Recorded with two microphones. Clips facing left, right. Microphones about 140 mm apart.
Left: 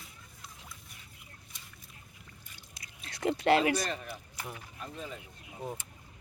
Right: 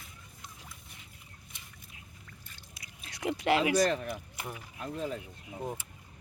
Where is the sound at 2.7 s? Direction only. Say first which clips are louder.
Left 2 dB; 15° right (ahead or behind).